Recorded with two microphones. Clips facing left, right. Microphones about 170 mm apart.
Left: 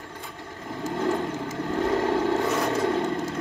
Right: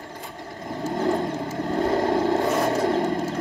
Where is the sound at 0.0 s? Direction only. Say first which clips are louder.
Right 3 dB; 35° right (ahead or behind).